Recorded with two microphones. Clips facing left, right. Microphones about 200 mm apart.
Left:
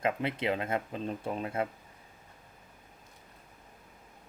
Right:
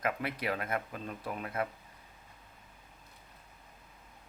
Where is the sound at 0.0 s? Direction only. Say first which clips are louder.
Left 4 dB; 25° left (ahead or behind).